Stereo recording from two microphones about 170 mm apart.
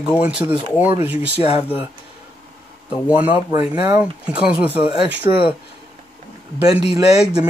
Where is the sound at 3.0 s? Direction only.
10° right (ahead or behind).